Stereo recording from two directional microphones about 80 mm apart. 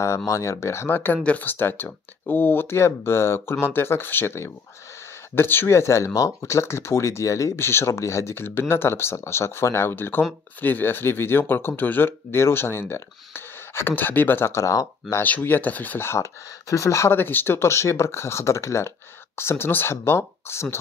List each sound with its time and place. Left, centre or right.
0.3 s speech: left
15.2 s speech: left